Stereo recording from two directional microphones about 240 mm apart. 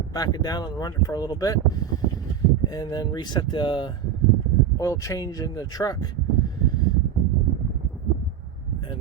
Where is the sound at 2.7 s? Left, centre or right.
Centre.